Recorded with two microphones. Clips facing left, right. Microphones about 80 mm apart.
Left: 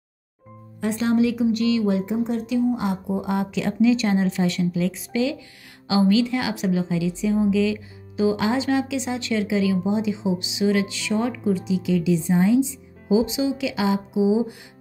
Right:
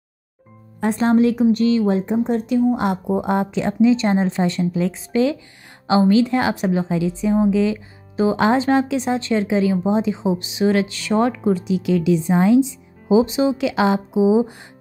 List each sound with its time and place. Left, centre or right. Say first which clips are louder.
0.7 s a woman's voice: right 4 dB; right
3.4 s a woman's voice: right 1 dB; right